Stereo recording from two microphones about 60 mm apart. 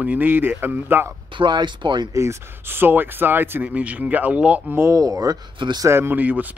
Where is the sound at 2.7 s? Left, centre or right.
Right.